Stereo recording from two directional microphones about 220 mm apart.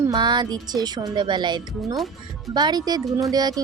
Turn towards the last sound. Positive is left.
turn(degrees=-15)  # may be behind; listen again after turning